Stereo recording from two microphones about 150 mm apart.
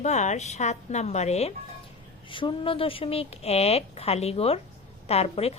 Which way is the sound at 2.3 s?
35° left (ahead or behind).